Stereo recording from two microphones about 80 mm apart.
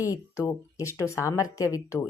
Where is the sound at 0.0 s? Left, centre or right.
Left.